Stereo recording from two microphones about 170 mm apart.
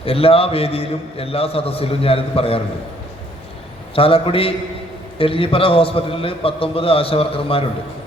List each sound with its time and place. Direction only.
0.0 s a man's voice: 35° left (ahead or behind)
3.9 s a man's voice: 35° left (ahead or behind)